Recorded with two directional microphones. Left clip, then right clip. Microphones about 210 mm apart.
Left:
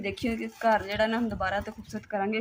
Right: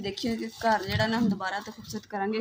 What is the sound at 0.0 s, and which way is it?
Speech, 35° left (ahead or behind).